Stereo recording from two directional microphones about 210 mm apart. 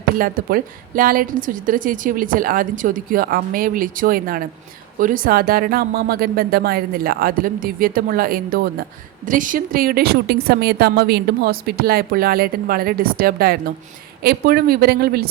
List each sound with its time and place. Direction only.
0.2 s a woman's voice: 45° right (ahead or behind)